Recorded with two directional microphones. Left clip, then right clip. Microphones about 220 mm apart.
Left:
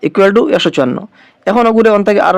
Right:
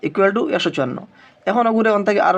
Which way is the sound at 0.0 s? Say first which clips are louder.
Left 8 dB; 35° left (ahead or behind).